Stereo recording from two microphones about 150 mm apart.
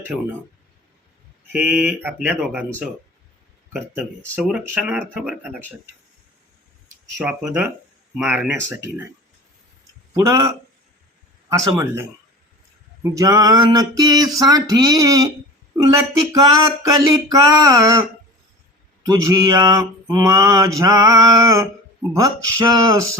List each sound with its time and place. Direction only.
1.5 s speech: 5° right (ahead or behind)
4.4 s speech: 5° right (ahead or behind)
7.3 s speech: 10° right (ahead or behind)
8.7 s speech: 15° right (ahead or behind)
10.2 s mantra: 20° right (ahead or behind)
19.0 s mantra: 20° right (ahead or behind)